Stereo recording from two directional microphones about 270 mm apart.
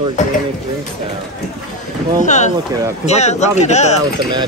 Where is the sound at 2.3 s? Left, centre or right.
Left.